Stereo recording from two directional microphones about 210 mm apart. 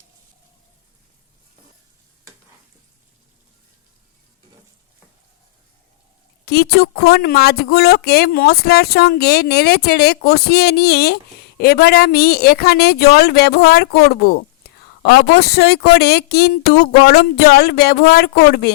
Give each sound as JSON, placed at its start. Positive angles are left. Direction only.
{"t": 6.4, "sound": "speech", "side_deg": 50}